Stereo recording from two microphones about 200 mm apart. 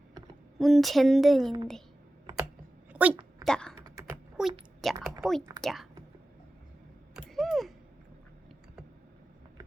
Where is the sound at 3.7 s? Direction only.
15° right (ahead or behind).